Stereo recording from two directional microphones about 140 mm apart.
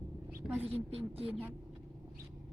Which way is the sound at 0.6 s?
45° right (ahead or behind).